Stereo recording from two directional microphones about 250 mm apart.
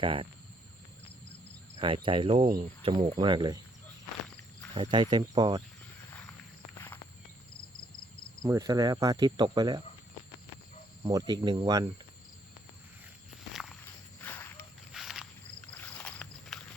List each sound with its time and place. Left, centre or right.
0.0 s speech: right
2.0 s speech: centre
4.7 s cricket: centre
6.1 s walk: centre
8.4 s cricket: centre
11.0 s cricket: centre
13.5 s walk: centre
14.2 s a sound: centre
14.9 s walk: centre